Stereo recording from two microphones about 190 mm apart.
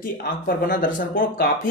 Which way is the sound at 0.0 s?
50° left (ahead or behind).